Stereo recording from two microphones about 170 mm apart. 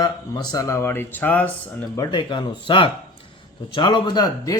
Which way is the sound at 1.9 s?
25° left (ahead or behind).